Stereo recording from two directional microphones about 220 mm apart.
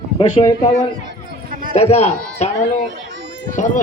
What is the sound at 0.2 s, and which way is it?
Speech, 20° left (ahead or behind).